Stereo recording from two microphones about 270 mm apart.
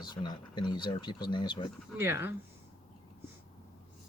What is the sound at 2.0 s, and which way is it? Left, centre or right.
Speech, centre.